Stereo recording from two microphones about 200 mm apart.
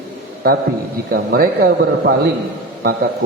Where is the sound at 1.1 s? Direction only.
45° right (ahead or behind).